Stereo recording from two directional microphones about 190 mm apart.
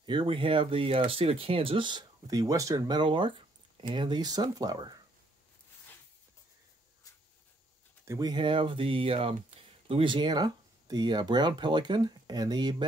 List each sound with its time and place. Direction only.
0.0 s speech: 25° right (ahead or behind)
8.0 s speech: 20° right (ahead or behind)